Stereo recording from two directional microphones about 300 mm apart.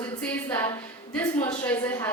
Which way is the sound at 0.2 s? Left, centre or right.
Centre.